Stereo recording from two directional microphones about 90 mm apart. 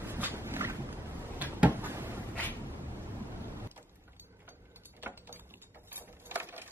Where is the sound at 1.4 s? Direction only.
20° right (ahead or behind).